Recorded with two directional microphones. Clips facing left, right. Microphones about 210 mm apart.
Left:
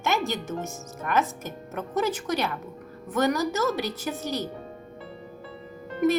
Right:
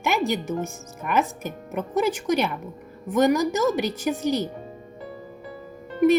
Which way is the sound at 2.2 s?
15° right (ahead or behind).